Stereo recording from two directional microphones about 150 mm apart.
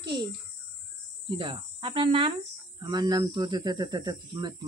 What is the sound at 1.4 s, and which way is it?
Speech, 35° right (ahead or behind).